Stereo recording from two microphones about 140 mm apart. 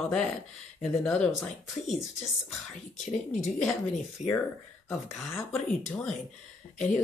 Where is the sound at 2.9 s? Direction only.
55° left (ahead or behind).